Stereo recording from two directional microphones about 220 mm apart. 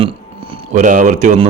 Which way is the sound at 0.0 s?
25° right (ahead or behind).